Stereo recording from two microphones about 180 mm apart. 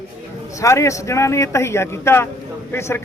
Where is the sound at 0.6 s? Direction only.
15° left (ahead or behind).